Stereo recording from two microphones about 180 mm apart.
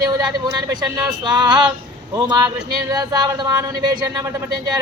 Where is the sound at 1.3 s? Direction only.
25° right (ahead or behind).